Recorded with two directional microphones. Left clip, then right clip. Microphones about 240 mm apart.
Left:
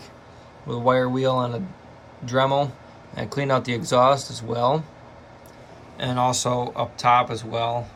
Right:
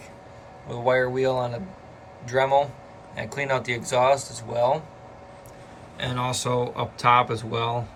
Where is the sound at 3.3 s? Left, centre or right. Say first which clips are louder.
Left 3 dB; centre.